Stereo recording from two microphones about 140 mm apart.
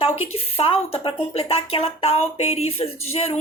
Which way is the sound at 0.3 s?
45° left (ahead or behind).